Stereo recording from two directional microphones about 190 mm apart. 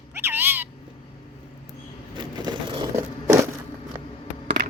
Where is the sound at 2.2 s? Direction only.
25° right (ahead or behind).